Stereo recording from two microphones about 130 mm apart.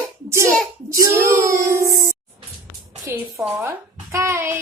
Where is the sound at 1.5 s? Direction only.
20° right (ahead or behind).